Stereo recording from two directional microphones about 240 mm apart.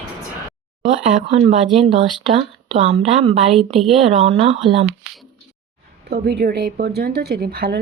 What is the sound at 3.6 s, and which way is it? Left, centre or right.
Speech, centre.